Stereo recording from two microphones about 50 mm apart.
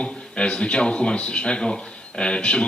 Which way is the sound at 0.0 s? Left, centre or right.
Left.